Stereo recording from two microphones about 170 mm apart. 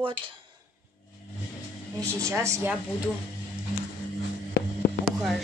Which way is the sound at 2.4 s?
15° right (ahead or behind).